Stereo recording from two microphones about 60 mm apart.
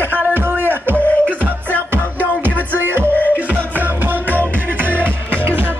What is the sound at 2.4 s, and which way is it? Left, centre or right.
Music, right.